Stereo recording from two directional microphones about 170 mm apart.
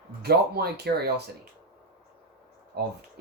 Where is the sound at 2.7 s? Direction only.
70° right (ahead or behind).